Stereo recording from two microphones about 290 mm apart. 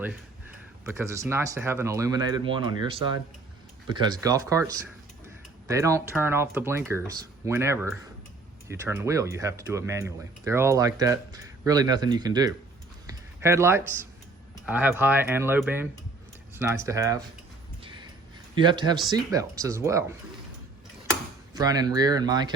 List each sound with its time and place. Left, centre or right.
0.9 s speech: centre
13.1 s a sound: centre
14.7 s speech: centre
17.8 s horse: centre
18.5 s speech: centre